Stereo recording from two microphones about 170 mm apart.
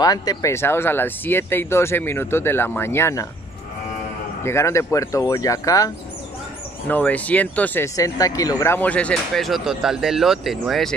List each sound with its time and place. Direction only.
0.0 s speech: 20° left (ahead or behind)
4.5 s speech: 15° left (ahead or behind)
6.9 s speech: 10° left (ahead or behind)